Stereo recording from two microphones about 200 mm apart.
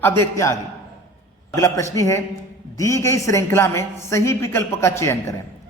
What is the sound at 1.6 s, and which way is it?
A woman's voice, 15° left (ahead or behind).